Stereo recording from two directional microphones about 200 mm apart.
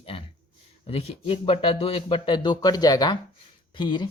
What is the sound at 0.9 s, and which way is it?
Speech, 30° left (ahead or behind).